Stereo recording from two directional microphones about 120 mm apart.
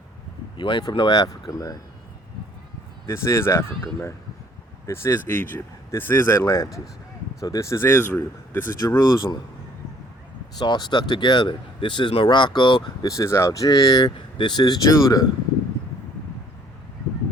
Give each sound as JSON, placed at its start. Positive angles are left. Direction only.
{"t": 0.5, "sound": "speech", "side_deg": 45}
{"t": 3.1, "sound": "speech", "side_deg": 20}
{"t": 4.9, "sound": "speech", "side_deg": 20}
{"t": 9.0, "sound": "speech", "side_deg": 35}
{"t": 10.6, "sound": "speech", "side_deg": 35}